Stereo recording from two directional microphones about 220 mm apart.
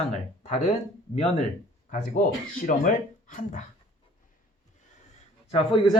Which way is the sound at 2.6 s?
35° left (ahead or behind).